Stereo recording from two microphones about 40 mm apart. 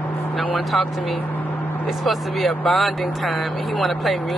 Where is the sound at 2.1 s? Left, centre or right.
Centre.